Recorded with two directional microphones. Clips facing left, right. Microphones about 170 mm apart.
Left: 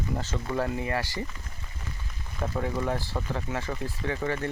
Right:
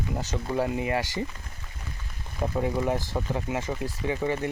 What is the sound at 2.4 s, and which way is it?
Speech, 15° right (ahead or behind).